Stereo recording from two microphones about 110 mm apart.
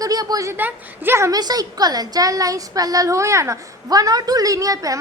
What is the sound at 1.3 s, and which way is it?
Speech, 35° right (ahead or behind).